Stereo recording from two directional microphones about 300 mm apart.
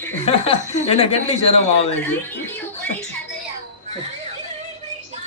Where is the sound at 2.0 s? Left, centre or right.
Centre.